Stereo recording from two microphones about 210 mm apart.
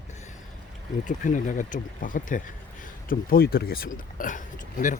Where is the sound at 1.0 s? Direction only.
40° left (ahead or behind).